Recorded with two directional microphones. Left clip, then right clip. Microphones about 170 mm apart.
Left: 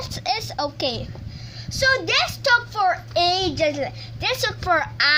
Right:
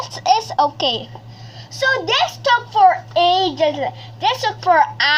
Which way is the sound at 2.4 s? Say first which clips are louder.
Right 9 dB; 40° left (ahead or behind).